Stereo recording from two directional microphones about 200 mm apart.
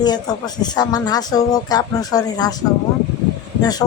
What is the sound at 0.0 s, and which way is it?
Speech, 20° left (ahead or behind).